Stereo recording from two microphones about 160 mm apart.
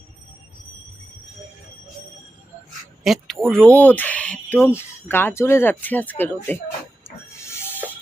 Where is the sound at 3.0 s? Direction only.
Centre (ahead or behind).